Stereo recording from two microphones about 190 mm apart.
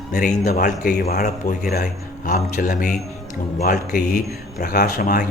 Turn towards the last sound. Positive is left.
turn(degrees=45)  # may be behind; listen again after turning